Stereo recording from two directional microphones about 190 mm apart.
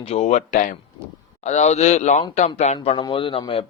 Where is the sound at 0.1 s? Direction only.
35° left (ahead or behind).